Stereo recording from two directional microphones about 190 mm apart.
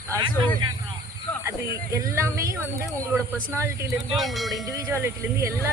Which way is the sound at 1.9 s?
15° right (ahead or behind).